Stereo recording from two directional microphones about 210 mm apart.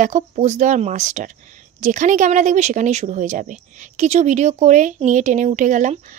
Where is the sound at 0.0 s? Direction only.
35° right (ahead or behind).